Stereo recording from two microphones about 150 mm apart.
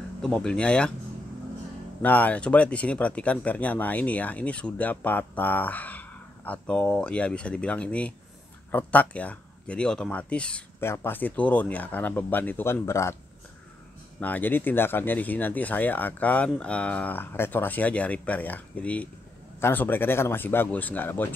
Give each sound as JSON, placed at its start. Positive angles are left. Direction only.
{"t": 0.2, "sound": "speech", "side_deg": 5}
{"t": 2.0, "sound": "speech", "side_deg": 10}
{"t": 14.2, "sound": "speech", "side_deg": 10}